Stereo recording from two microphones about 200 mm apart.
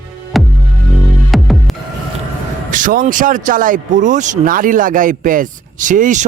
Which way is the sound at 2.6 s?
40° right (ahead or behind).